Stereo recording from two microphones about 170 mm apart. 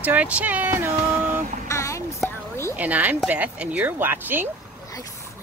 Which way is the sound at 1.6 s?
15° left (ahead or behind).